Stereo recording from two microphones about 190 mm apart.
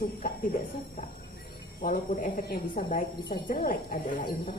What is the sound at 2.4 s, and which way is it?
A woman's voice, 55° left (ahead or behind).